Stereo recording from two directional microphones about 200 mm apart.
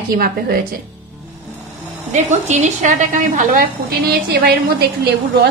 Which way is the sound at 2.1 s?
35° right (ahead or behind).